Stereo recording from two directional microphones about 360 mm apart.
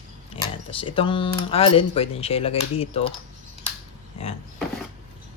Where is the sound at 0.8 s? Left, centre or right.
Centre.